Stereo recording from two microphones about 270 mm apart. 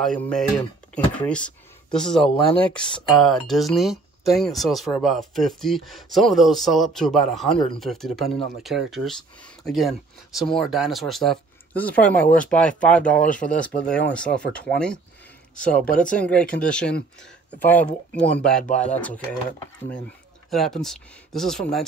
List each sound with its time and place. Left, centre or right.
0.0 s speech: centre
18.6 s speech: left
18.9 s speech: centre
20.4 s speech: centre